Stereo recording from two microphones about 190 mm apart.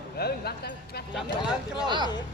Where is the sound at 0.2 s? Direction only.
55° left (ahead or behind).